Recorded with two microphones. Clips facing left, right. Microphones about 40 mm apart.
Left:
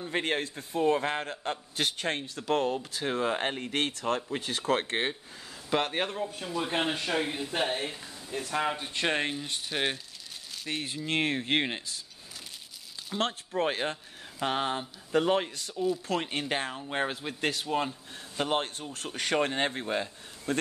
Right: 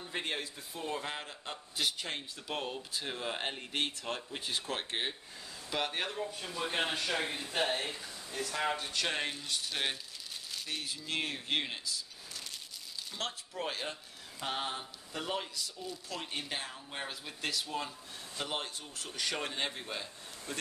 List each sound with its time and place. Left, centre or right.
0.1 s a man's voice: left
5.7 s speech: left
6.4 s speech: centre
8.6 s speech: centre
8.9 s speech: left
9.7 s speech: centre
10.7 s speech: left
13.2 s a man's voice: left